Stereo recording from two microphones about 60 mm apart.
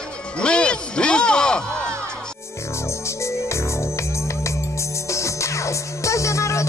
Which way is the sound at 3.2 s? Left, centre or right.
Left.